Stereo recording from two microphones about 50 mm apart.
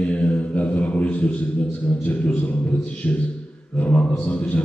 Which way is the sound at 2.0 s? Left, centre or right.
Left.